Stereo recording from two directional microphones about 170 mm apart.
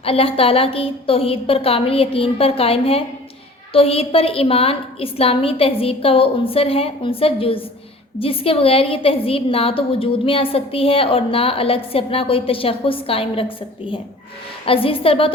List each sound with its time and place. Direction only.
0.0 s a woman's voice: 35° left (ahead or behind)
14.6 s a woman's voice: 35° left (ahead or behind)